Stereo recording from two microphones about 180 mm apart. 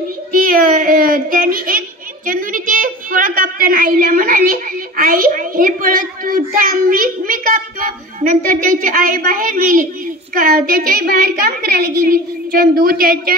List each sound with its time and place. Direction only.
0.3 s children playing: 50° right (ahead or behind)
10.3 s a woman's voice: 50° right (ahead or behind)